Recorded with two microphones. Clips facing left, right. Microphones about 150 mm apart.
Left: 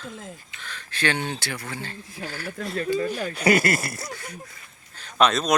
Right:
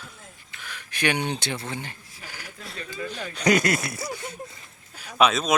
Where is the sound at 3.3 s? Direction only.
5° left (ahead or behind).